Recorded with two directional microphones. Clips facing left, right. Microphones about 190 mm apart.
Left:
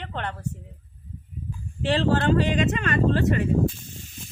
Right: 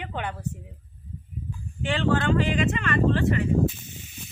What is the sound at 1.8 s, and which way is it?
Speech, 35° left (ahead or behind).